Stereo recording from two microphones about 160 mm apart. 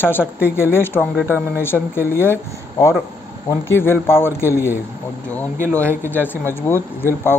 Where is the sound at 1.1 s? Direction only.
10° right (ahead or behind).